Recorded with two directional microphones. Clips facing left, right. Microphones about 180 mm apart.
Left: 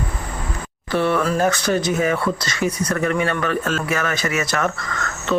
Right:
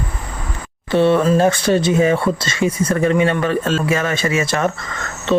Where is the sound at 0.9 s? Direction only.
25° right (ahead or behind).